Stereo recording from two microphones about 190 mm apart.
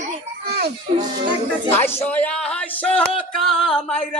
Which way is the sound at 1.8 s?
10° left (ahead or behind).